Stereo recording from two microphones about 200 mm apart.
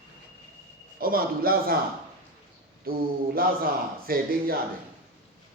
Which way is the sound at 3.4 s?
50° right (ahead or behind).